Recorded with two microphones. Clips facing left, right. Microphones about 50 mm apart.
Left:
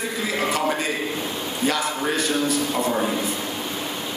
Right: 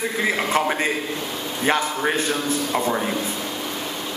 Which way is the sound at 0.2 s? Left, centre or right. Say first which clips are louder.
Right 2 dB; right.